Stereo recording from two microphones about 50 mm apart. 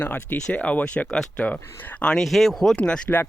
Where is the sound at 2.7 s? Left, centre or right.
Centre.